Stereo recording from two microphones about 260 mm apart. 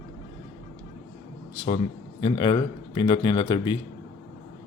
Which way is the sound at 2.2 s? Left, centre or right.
Centre.